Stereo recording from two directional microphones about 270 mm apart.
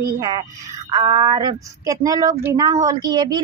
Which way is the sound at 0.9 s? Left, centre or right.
Centre.